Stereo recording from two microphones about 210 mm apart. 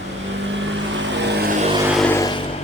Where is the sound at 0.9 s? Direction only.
60° right (ahead or behind).